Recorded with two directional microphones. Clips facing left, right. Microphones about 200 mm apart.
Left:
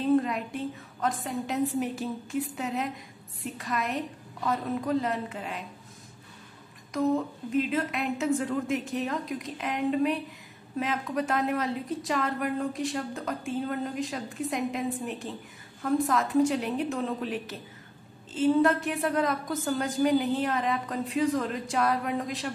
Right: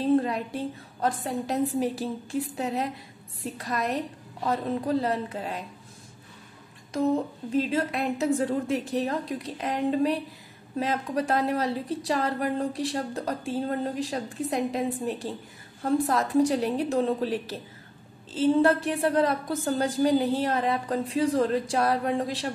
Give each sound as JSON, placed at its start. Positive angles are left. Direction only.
{"t": 0.1, "sound": "a woman's voice", "side_deg": -35}
{"t": 7.5, "sound": "a woman's voice", "side_deg": -35}